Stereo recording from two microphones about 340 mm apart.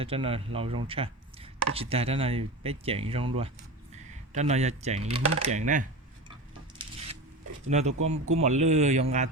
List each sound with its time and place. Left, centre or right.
0.0 s speech: centre
6.8 s a sound: centre
7.7 s speech: centre